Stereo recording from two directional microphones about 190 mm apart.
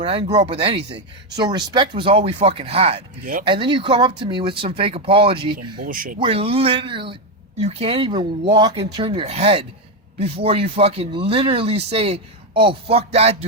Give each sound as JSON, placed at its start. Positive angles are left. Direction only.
{"t": 0.0, "sound": "speech", "side_deg": -30}
{"t": 5.8, "sound": "speech", "side_deg": -45}
{"t": 6.1, "sound": "speech", "side_deg": -30}